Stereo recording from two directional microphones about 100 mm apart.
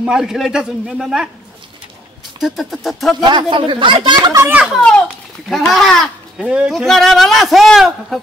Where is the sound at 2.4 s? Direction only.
Centre (ahead or behind).